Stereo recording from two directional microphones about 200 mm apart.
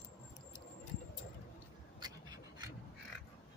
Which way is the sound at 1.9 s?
20° right (ahead or behind).